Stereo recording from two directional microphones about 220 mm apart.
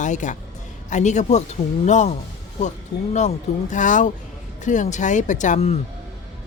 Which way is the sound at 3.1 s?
35° left (ahead or behind).